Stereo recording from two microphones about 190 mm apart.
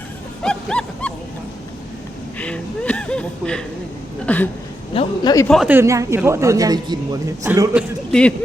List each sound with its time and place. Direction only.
0.4 s wild animals: 5° left (ahead or behind)
2.4 s a woman's voice: 5° left (ahead or behind)
4.9 s a man's voice: 20° left (ahead or behind)
5.5 s a woman's voice: centre (ahead or behind)
5.7 s a man's voice: 15° right (ahead or behind)